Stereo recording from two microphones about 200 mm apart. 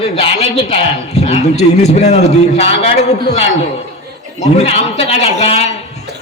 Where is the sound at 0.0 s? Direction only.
30° left (ahead or behind).